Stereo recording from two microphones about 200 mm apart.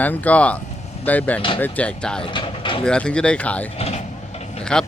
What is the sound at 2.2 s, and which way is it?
Speech, 25° left (ahead or behind).